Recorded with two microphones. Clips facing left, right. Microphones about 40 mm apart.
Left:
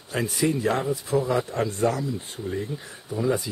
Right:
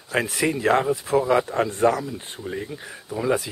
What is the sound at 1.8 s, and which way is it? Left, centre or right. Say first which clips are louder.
Speech: right 5 dB; right.